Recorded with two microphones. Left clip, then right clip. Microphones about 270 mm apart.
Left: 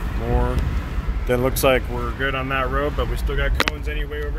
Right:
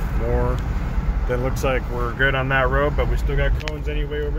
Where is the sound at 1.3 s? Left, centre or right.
Left.